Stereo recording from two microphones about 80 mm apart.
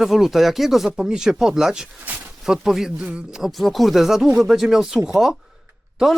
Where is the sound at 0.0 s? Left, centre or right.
Centre.